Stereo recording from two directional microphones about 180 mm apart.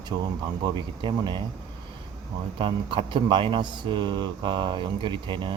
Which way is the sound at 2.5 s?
30° right (ahead or behind).